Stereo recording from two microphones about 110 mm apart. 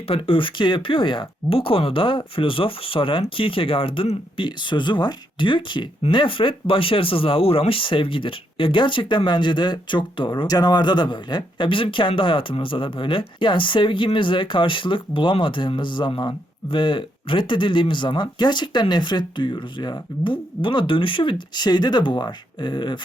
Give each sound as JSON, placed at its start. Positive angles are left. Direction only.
{"t": 0.1, "sound": "speech", "side_deg": 55}